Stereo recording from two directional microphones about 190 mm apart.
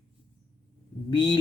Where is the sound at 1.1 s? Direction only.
25° left (ahead or behind).